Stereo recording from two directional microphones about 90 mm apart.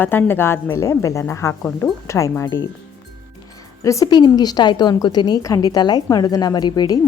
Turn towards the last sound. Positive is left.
turn(degrees=45)  # may be behind; listen again after turning